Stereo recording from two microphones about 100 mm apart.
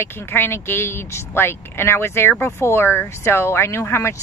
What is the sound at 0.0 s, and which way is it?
Speech, 25° left (ahead or behind).